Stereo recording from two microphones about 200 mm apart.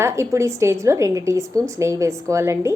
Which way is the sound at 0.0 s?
15° right (ahead or behind).